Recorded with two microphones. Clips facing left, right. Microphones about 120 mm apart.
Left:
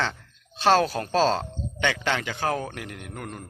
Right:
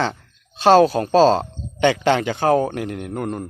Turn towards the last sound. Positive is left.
turn(degrees=-35)  # may be behind; listen again after turning